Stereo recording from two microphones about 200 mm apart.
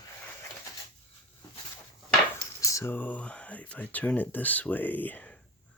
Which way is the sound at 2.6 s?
15° left (ahead or behind).